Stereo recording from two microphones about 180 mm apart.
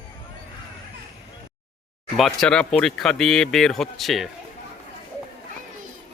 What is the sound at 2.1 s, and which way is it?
A man's voice, centre (ahead or behind).